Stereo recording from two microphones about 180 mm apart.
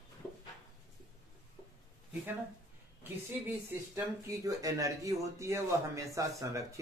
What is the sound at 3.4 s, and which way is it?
Speech, 15° right (ahead or behind).